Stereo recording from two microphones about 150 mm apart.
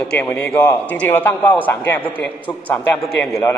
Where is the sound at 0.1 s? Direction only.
5° left (ahead or behind).